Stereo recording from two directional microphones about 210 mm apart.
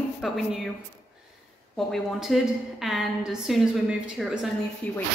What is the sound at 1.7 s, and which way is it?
A woman's voice, centre (ahead or behind).